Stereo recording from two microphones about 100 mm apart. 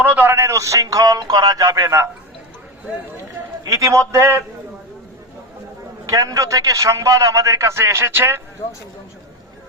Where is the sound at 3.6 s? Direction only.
35° right (ahead or behind).